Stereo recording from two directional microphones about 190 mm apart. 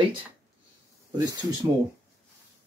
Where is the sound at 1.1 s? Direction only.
20° right (ahead or behind).